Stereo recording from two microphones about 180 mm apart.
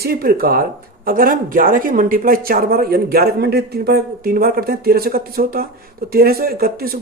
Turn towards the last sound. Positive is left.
turn(degrees=-55)  # may be behind; listen again after turning